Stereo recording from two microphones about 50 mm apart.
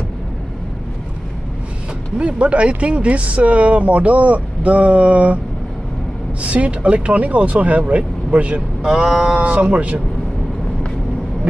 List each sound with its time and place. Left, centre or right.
2.1 s speech: right
6.4 s speech: right